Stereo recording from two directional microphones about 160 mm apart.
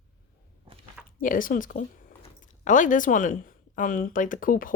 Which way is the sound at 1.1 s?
60° left (ahead or behind).